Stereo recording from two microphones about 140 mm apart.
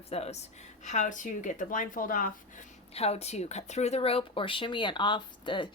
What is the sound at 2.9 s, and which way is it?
Speech, 45° left (ahead or behind).